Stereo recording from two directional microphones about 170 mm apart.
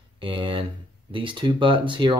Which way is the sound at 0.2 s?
30° right (ahead or behind).